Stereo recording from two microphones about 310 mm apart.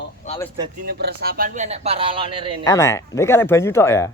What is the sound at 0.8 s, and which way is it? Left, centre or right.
Speech, right.